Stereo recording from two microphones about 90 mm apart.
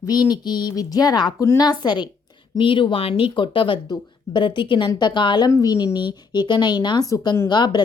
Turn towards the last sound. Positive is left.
turn(degrees=55)  # may be behind; listen again after turning